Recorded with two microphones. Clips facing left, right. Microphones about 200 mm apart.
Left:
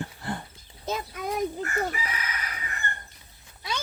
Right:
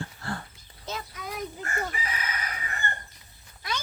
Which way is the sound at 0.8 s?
45° left (ahead or behind).